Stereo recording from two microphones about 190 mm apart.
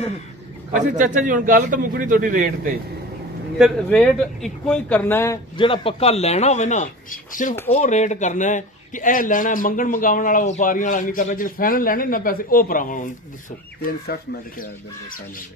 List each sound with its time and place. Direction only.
0.8 s a man's voice: 40° right (ahead or behind)
3.5 s speech: centre (ahead or behind)
5.6 s a man's voice: 30° left (ahead or behind); by 14.7 s 55° left (ahead or behind)